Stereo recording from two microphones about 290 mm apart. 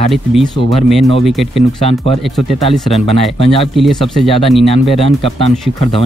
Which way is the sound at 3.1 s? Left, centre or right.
Centre.